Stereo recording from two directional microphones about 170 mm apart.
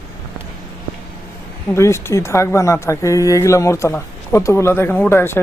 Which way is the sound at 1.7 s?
15° left (ahead or behind).